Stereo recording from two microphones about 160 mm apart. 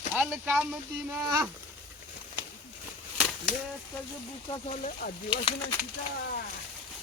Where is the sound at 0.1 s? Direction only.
10° right (ahead or behind).